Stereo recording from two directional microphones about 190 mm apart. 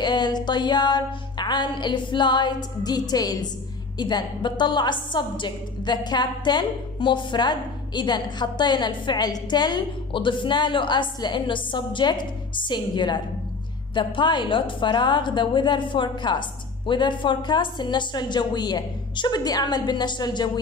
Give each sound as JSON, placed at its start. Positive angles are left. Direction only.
{"t": 0.0, "sound": "a woman's voice", "side_deg": 20}